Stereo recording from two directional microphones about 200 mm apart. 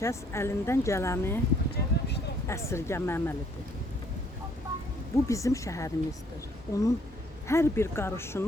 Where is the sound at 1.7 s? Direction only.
55° left (ahead or behind).